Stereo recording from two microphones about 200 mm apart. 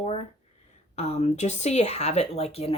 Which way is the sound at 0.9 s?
35° left (ahead or behind).